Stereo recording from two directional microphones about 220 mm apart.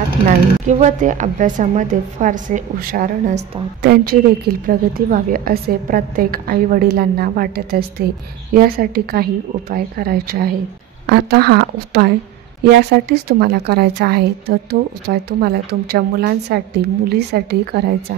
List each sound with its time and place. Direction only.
0.7 s a woman's voice: 35° right (ahead or behind)